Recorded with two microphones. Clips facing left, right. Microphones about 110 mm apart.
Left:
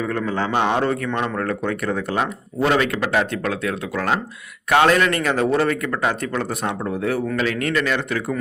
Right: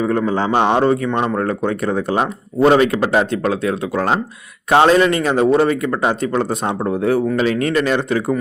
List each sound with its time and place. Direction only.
0.0 s a man's voice: 25° right (ahead or behind)